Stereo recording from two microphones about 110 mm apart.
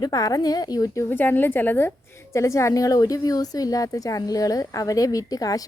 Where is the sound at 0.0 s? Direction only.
35° left (ahead or behind).